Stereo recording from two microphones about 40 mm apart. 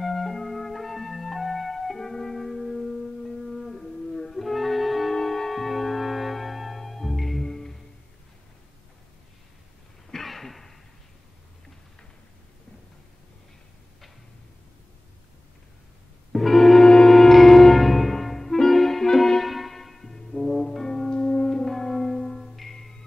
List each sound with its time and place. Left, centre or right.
0.0 s music: centre
5.1 s music: centre
10.1 s a sound: centre
16.3 s music: centre
19.5 s church bell: centre
20.6 s music: centre
21.1 s music: left
21.5 s music: centre